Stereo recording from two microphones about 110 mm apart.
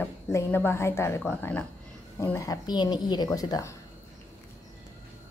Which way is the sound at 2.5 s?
40° left (ahead or behind).